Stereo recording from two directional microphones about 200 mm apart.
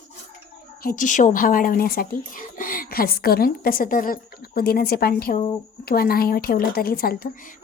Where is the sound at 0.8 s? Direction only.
40° left (ahead or behind).